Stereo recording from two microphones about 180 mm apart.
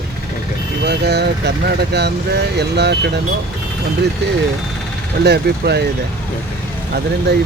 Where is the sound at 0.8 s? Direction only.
65° right (ahead or behind).